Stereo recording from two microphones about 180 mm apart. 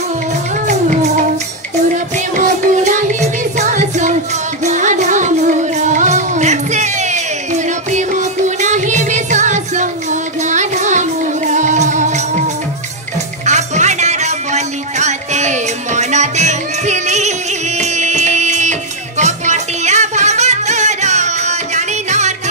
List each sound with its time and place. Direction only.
2.4 s music: 45° right (ahead or behind)
13.5 s music: 40° right (ahead or behind)